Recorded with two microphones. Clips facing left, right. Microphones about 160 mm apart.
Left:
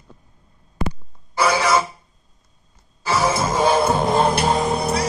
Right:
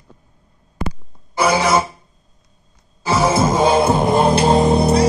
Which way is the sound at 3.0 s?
20° right (ahead or behind).